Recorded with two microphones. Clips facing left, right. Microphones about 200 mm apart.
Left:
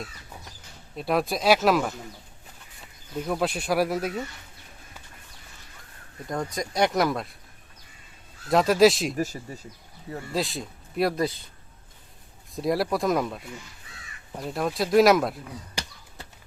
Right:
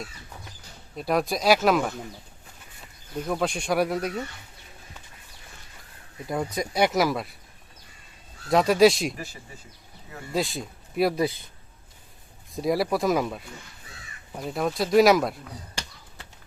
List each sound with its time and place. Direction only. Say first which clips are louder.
0.9 s speech: even; centre (ahead or behind)
3.2 s speech: even; 5° left (ahead or behind)
6.2 s speech: right 2 dB; 5° right (ahead or behind)
8.4 s speech: even; centre (ahead or behind)
9.1 s speech: left 10 dB; 40° left (ahead or behind)
10.3 s speech: right 2 dB; centre (ahead or behind)
12.5 s speech: right 1 dB; centre (ahead or behind)